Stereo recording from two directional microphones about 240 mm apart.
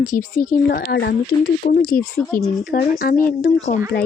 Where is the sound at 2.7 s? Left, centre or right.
Left.